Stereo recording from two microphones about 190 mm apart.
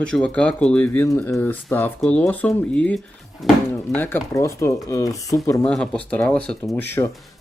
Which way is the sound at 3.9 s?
10° left (ahead or behind).